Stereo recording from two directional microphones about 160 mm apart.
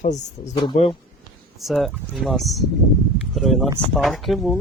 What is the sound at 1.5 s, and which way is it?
Speech, centre (ahead or behind).